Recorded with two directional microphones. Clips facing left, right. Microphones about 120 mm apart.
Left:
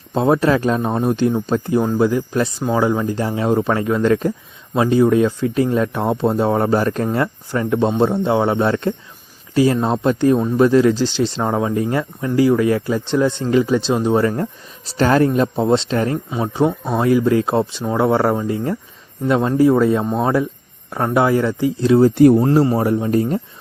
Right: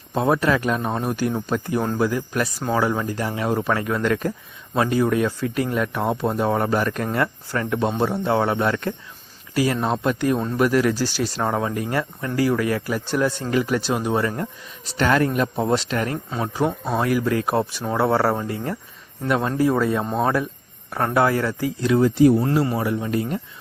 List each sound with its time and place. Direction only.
0.1 s speech: 25° left (ahead or behind)
10.3 s speech: 10° left (ahead or behind)
10.6 s speech: 25° left (ahead or behind)
22.1 s speech: 55° left (ahead or behind)
22.6 s speech: 40° left (ahead or behind)